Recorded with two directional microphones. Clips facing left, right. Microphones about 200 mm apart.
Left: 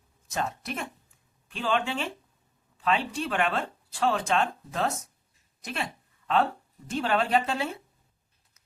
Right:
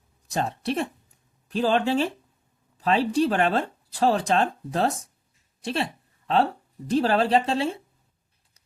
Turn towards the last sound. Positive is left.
turn(degrees=-30)  # may be behind; listen again after turning